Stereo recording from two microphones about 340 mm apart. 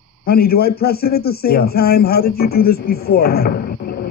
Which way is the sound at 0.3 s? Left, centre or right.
Left.